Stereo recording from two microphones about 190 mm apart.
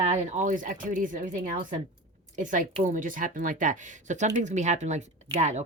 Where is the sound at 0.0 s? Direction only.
35° right (ahead or behind).